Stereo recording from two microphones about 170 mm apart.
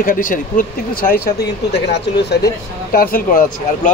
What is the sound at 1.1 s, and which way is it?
A man's voice, 70° left (ahead or behind).